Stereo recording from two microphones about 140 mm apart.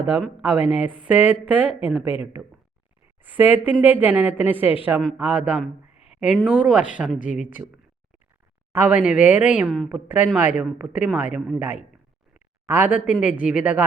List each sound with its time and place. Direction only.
0.4 s speech: 10° right (ahead or behind)
6.1 s a sound: 5° right (ahead or behind)
6.4 s speech: 5° right (ahead or behind)
7.2 s speech: 65° left (ahead or behind)
8.7 s speech: 10° right (ahead or behind)
11.3 s a woman's voice: 5° left (ahead or behind)
12.3 s speech: 10° right (ahead or behind)